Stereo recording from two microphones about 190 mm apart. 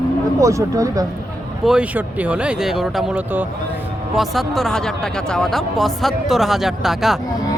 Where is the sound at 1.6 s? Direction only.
5° right (ahead or behind).